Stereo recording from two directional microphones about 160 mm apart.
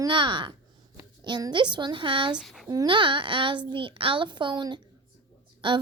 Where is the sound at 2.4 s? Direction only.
Centre (ahead or behind).